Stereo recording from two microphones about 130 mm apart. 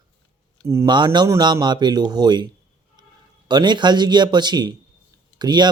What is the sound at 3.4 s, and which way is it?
Speech, 35° right (ahead or behind).